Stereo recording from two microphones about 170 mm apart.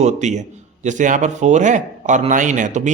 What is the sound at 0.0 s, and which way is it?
A man's voice, 45° right (ahead or behind).